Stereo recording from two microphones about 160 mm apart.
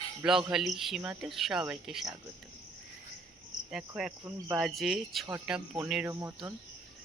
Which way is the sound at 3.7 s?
5° right (ahead or behind).